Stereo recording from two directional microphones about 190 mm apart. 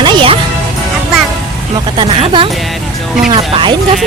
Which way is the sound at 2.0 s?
25° right (ahead or behind).